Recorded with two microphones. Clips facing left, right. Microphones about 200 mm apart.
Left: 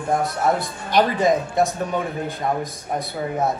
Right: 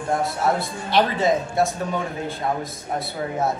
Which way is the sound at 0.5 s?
15° left (ahead or behind).